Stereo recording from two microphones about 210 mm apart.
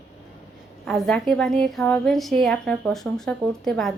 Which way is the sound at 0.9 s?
Centre (ahead or behind).